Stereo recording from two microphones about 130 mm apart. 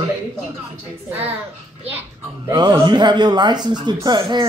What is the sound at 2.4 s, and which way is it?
Speech, 30° right (ahead or behind).